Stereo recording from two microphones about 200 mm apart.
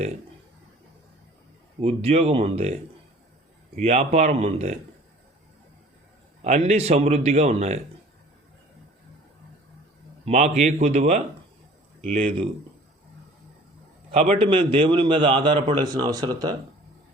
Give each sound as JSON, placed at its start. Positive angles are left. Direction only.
{"t": 1.8, "sound": "speech", "side_deg": -30}
{"t": 3.8, "sound": "speech", "side_deg": -30}
{"t": 6.4, "sound": "speech", "side_deg": -35}
{"t": 10.2, "sound": "speech", "side_deg": -35}
{"t": 14.1, "sound": "a man's voice", "side_deg": -30}